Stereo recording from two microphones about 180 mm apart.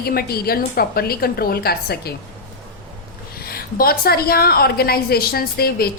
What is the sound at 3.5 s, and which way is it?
A woman's voice, 55° left (ahead or behind).